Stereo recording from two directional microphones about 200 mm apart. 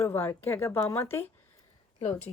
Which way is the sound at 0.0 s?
10° left (ahead or behind).